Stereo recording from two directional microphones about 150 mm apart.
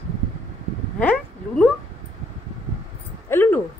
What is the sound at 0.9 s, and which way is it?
Speech, 10° left (ahead or behind).